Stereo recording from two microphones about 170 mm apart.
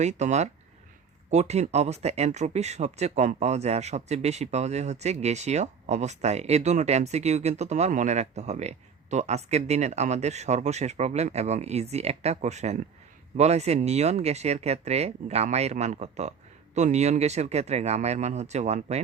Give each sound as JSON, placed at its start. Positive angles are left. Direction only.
{"t": 0.0, "sound": "speech", "side_deg": -45}